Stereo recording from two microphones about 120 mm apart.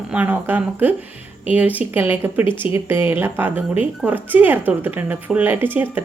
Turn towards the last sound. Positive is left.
turn(degrees=-15)  # may be behind; listen again after turning